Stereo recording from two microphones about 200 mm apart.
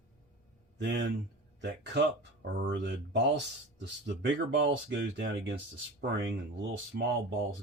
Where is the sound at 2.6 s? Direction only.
65° right (ahead or behind).